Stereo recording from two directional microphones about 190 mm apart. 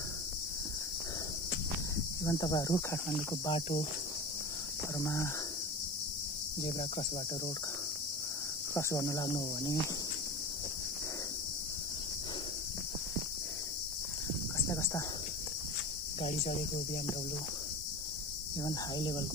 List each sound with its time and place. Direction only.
2.2 s speech: 20° left (ahead or behind)
4.9 s speech: 15° left (ahead or behind)
6.6 s speech: 35° left (ahead or behind)
8.7 s speech: 15° left (ahead or behind)
14.7 s cricket: 15° left (ahead or behind)
16.2 s speech: 35° left (ahead or behind)
18.6 s speech: 20° left (ahead or behind)